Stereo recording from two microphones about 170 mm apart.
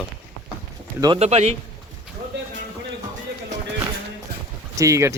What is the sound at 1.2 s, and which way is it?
Speech, 40° right (ahead or behind).